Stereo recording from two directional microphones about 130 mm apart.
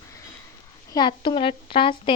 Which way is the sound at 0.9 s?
35° left (ahead or behind).